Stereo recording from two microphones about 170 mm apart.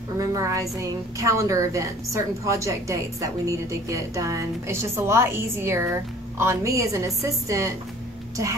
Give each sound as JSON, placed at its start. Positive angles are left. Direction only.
{"t": 0.2, "sound": "a woman's voice", "side_deg": -20}